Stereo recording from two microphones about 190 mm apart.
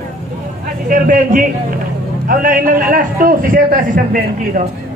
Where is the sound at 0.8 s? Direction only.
45° right (ahead or behind).